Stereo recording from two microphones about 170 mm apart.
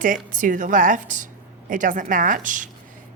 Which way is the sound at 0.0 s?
50° right (ahead or behind).